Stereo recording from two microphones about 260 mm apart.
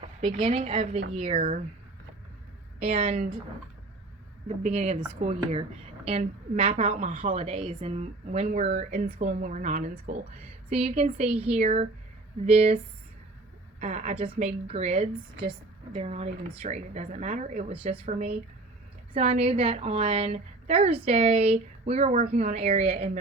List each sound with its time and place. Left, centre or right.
0.0 s a woman's voice: right
2.8 s a woman's voice: right
4.4 s a woman's voice: right
11.3 s speech: centre
11.5 s a woman's voice: right
19.1 s a woman's voice: right